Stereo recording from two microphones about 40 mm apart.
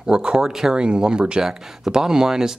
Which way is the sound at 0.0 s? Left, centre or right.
Right.